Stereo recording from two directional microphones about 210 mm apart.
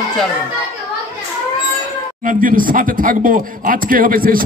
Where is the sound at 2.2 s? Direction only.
40° right (ahead or behind).